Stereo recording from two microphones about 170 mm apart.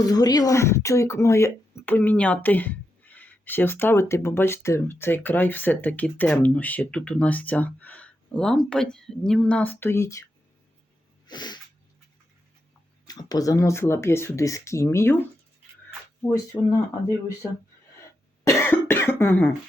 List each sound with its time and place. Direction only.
0.1 s speech: 20° left (ahead or behind)
11.3 s sneeze: 25° left (ahead or behind)
13.1 s speech: 20° left (ahead or behind)
16.2 s speech: 20° left (ahead or behind)
18.4 s cough: 15° left (ahead or behind)